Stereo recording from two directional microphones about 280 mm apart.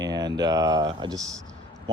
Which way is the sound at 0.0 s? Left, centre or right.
Centre.